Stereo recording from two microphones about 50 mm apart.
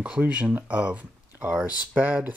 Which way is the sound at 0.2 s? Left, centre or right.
Right.